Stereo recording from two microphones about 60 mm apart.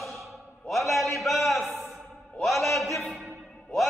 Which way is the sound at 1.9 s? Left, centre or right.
Centre.